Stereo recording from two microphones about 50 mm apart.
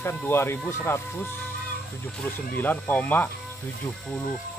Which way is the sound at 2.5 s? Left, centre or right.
Left.